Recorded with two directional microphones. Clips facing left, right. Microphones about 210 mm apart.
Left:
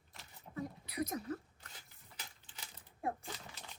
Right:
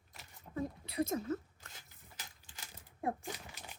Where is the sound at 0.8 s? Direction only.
30° right (ahead or behind).